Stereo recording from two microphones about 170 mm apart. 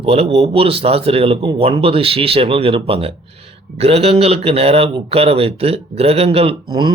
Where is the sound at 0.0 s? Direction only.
35° right (ahead or behind).